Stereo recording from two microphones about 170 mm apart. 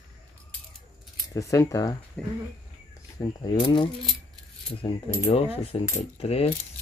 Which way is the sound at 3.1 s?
25° left (ahead or behind).